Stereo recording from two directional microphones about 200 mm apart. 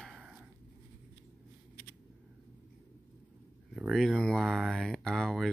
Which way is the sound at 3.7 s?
Centre (ahead or behind).